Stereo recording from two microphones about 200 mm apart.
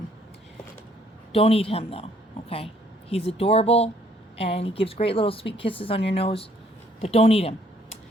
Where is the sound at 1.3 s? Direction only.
30° left (ahead or behind).